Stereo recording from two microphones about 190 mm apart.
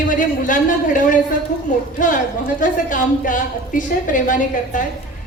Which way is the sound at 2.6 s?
45° left (ahead or behind).